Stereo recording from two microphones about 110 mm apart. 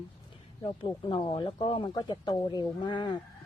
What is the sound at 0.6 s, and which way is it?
Speech, 45° left (ahead or behind).